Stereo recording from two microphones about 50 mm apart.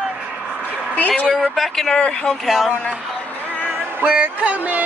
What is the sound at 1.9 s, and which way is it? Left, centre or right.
Speech, centre.